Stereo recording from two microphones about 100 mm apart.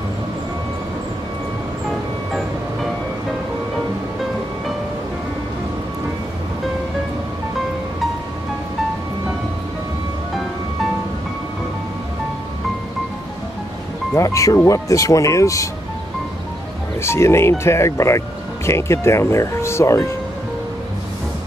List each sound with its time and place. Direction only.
1.9 s music: centre (ahead or behind)
14.1 s speech: 30° left (ahead or behind)
17.0 s speech: 25° left (ahead or behind)